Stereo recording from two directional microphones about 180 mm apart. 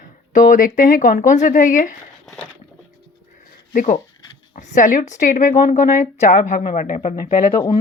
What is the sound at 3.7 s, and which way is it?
Speech, 50° left (ahead or behind).